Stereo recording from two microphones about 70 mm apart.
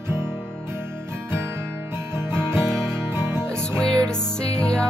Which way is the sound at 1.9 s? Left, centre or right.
Right.